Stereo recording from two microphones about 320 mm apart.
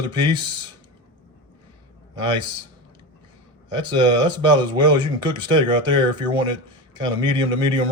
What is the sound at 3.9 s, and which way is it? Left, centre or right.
Speech, centre.